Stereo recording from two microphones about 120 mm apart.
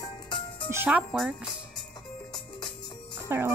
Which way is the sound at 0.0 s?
40° left (ahead or behind).